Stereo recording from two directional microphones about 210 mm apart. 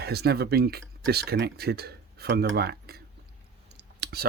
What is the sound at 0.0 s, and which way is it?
Speech, 50° right (ahead or behind).